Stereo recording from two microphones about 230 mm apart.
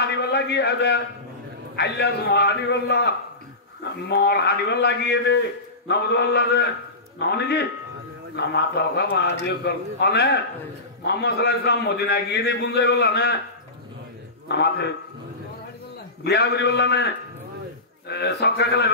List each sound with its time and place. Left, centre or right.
0.0 s a sound: left
1.8 s a man's voice: left
14.5 s a man's voice: left
16.3 s a man's voice: left